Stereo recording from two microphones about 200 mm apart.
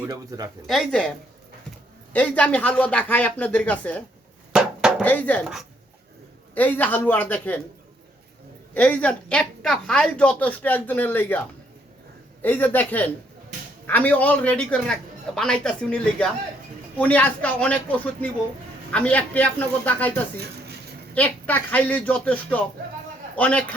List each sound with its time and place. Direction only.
0.1 s speech: 20° right (ahead or behind)
0.7 s speech: centre (ahead or behind)
2.1 s a woman's voice: 5° left (ahead or behind)
4.5 s chopping: 5° right (ahead or behind)
5.0 s a woman's voice: 10° left (ahead or behind)
6.5 s a woman's voice: 10° left (ahead or behind)
8.7 s a woman's voice: 10° left (ahead or behind)
21.2 s a woman's voice: 10° left (ahead or behind)